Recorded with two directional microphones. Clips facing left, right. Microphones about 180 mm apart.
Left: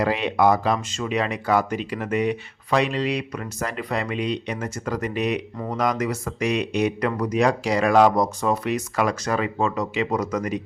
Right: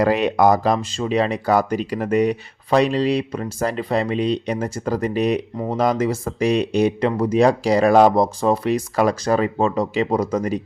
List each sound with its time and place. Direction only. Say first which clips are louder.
0.0 s speech: right 4 dB; 45° right (ahead or behind)